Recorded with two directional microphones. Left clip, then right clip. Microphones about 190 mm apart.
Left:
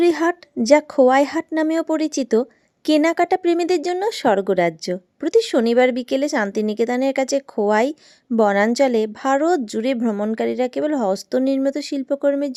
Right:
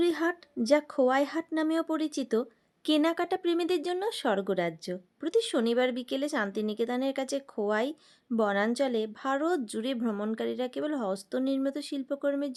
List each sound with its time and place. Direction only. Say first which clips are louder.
0.0 s speech: left 10 dB; 40° left (ahead or behind)